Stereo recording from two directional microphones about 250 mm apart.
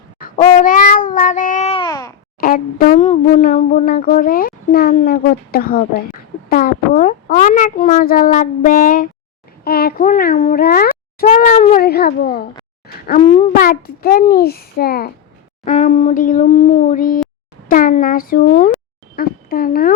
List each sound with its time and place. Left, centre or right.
0.3 s babbling: left; by 2.1 s centre
2.4 s a child's voice: left
13.2 s a child's voice: left
13.6 s speech: left